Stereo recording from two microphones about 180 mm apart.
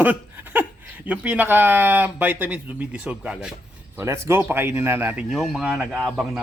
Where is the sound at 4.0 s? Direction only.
15° right (ahead or behind).